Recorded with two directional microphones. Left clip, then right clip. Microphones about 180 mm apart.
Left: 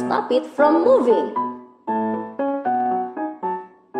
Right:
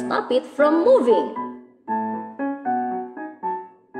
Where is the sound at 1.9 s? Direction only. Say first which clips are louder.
Left 2 dB; 30° left (ahead or behind).